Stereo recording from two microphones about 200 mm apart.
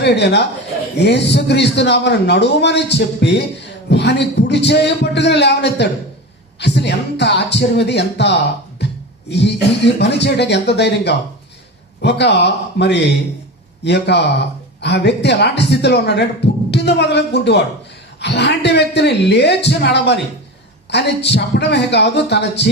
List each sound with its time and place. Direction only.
0.0 s a man's voice: 55° left (ahead or behind)
8.8 s a sound: 60° left (ahead or behind)
9.3 s a man's voice: 60° left (ahead or behind)